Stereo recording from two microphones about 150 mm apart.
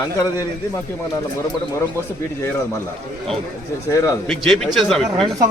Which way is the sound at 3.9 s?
20° left (ahead or behind).